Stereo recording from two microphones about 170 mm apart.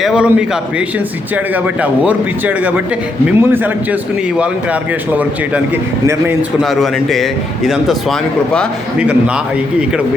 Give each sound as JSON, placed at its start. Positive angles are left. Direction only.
{"t": 0.0, "sound": "a man's voice", "side_deg": -5}
{"t": 6.6, "sound": "speech", "side_deg": 0}